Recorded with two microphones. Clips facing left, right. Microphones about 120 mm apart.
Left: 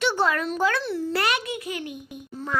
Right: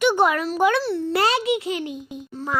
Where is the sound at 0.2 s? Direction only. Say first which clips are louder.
Right 4 dB; 15° right (ahead or behind).